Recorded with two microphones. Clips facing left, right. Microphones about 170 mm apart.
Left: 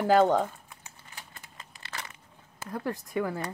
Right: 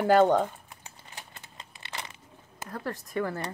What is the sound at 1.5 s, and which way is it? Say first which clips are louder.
Crumpling: right 1 dB; 25° right (ahead or behind).